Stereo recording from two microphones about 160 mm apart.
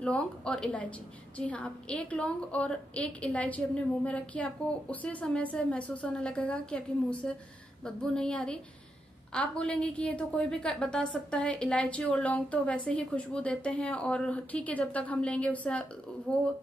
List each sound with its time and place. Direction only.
0.0 s a woman's voice: 5° left (ahead or behind)